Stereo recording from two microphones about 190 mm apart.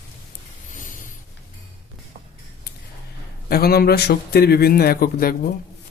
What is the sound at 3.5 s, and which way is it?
Speech, 55° left (ahead or behind).